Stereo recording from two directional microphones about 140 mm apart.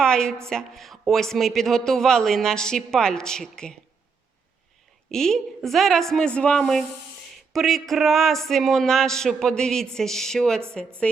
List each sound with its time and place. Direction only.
0.0 s speech: 5° left (ahead or behind)
5.1 s speech: 5° left (ahead or behind)